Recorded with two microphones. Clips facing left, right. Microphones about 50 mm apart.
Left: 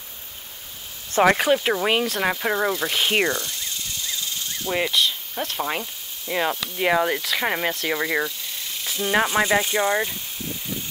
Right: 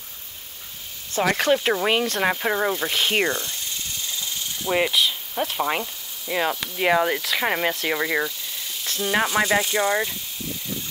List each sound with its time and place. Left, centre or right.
1.2 s speech: left
1.5 s speech: centre
3.3 s speech: right
4.6 s speech: centre